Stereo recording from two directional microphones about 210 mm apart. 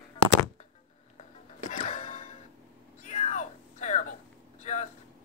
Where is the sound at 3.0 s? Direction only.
35° left (ahead or behind).